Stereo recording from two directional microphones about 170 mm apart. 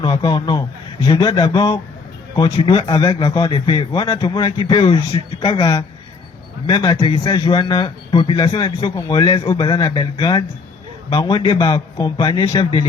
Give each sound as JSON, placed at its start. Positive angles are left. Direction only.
{"t": 0.0, "sound": "a man's voice", "side_deg": 30}